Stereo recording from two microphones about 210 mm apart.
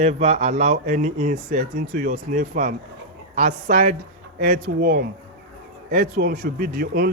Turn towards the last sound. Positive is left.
turn(degrees=-45)  # may be behind; listen again after turning